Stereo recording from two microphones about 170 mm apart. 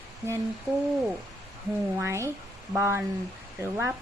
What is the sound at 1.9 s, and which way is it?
A woman's voice, 15° right (ahead or behind).